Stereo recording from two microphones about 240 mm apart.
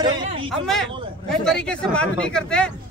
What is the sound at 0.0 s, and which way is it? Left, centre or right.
Speech, right.